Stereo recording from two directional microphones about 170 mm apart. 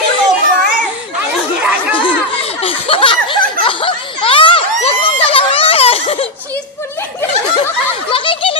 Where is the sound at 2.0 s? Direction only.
30° left (ahead or behind).